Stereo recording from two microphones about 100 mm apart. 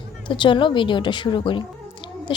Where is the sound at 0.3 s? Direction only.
55° left (ahead or behind).